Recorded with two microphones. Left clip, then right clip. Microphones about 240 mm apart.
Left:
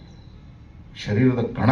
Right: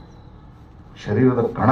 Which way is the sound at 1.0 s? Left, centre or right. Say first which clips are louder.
Right 4 dB; left.